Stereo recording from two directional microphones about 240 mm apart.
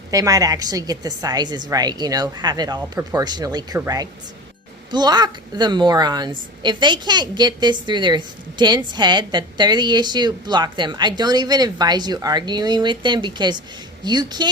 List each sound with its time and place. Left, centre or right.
0.1 s a woman's voice: centre